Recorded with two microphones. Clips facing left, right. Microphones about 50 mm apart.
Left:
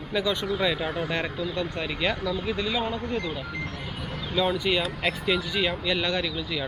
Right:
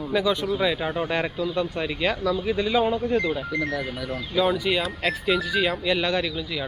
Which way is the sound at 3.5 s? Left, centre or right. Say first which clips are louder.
Right 8 dB; right.